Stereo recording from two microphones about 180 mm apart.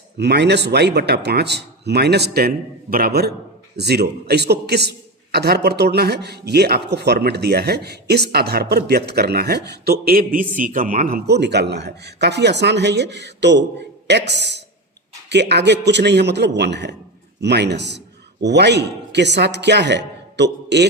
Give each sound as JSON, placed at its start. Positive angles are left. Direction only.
{"t": 0.2, "sound": "a man's voice", "side_deg": -70}